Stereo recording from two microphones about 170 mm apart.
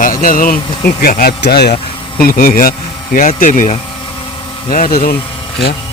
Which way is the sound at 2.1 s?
60° left (ahead or behind).